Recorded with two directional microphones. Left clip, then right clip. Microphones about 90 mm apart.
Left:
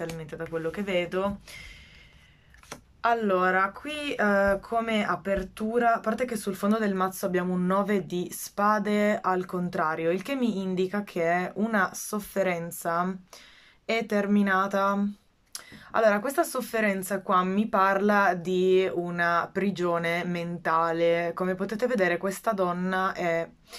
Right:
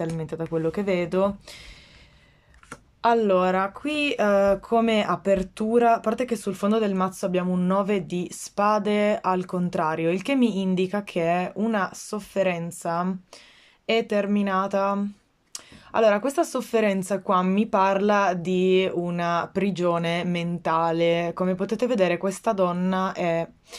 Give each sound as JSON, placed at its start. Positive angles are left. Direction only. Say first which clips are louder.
{"t": 0.4, "sound": "speech", "louder": "right 5 dB", "side_deg": -45}
{"t": 3.0, "sound": "speech", "louder": "right 4 dB", "side_deg": -40}